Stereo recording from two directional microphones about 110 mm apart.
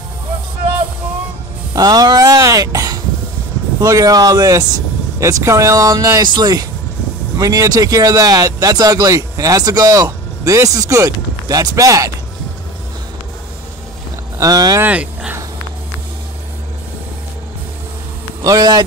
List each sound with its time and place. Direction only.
1.8 s speech: 35° right (ahead or behind)
6.2 s speech: 40° right (ahead or behind)
14.4 s speech: 35° right (ahead or behind)
14.8 s speech: 10° right (ahead or behind)
18.4 s speech: 35° right (ahead or behind)